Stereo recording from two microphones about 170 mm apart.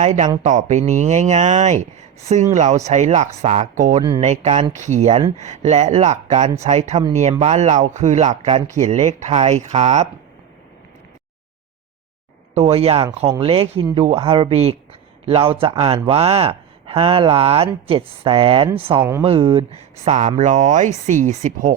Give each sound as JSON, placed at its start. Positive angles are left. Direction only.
{"t": 0.0, "sound": "speech", "side_deg": -45}
{"t": 12.5, "sound": "speech", "side_deg": -35}